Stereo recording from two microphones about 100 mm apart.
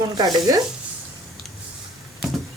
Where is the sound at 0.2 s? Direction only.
40° right (ahead or behind).